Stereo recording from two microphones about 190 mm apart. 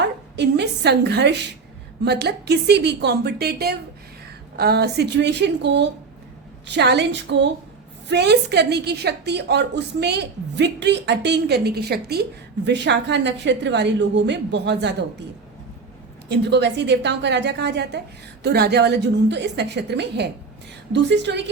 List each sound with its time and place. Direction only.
0.0 s a woman's voice: 65° right (ahead or behind)
16.3 s a woman's voice: 65° right (ahead or behind)